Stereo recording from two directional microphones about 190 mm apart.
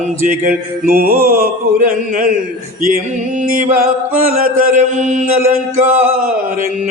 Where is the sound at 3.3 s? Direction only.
45° right (ahead or behind).